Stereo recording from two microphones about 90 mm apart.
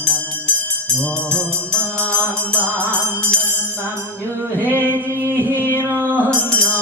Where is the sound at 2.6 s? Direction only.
25° right (ahead or behind).